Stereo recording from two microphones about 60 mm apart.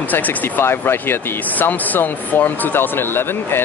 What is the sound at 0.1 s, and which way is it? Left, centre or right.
Speech, left.